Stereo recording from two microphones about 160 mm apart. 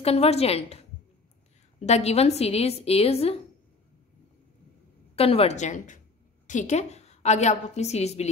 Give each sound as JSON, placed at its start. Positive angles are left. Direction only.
{"t": 0.0, "sound": "a woman's voice", "side_deg": 40}
{"t": 1.9, "sound": "a woman's voice", "side_deg": 40}
{"t": 5.1, "sound": "a woman's voice", "side_deg": 40}